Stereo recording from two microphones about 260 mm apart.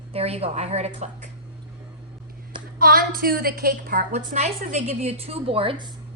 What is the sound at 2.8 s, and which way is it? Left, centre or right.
A woman's voice, right.